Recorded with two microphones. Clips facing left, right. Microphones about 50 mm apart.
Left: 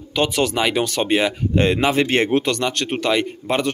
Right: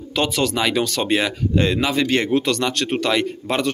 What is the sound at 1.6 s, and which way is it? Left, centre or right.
Speech, left.